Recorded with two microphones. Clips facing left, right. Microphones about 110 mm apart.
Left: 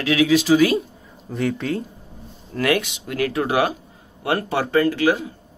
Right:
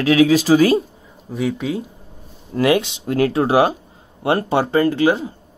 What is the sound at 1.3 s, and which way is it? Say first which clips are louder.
Speech: right 1 dB; 5° right (ahead or behind).